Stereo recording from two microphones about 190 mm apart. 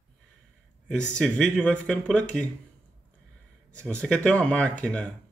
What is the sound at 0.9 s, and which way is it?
Speech, 5° left (ahead or behind).